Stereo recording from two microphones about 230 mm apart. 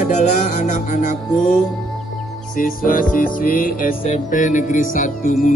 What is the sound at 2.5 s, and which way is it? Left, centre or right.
Music, left.